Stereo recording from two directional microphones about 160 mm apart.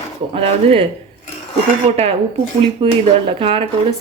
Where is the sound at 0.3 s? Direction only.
40° right (ahead or behind).